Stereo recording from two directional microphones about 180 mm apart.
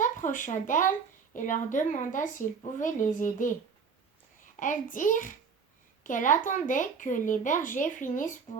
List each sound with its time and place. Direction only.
0.0 s speech: 45° left (ahead or behind)
4.6 s speech: 45° left (ahead or behind)